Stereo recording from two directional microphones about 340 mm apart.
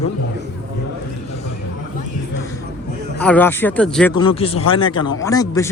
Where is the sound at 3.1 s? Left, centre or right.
Centre.